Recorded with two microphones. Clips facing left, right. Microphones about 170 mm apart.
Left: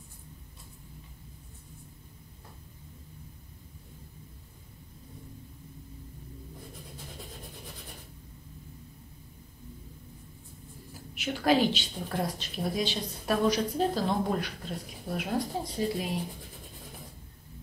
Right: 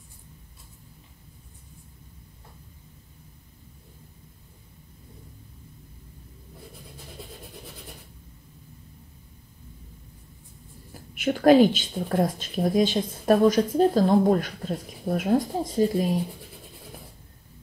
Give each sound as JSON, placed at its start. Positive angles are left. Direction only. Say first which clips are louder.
{"t": 11.1, "sound": "a woman's voice", "louder": "right 9 dB", "side_deg": -50}